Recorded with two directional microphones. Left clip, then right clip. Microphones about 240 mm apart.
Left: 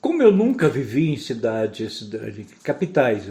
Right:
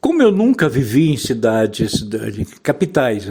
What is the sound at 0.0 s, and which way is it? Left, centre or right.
Speech, right.